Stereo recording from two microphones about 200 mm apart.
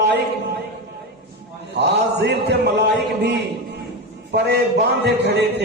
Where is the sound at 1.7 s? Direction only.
55° right (ahead or behind).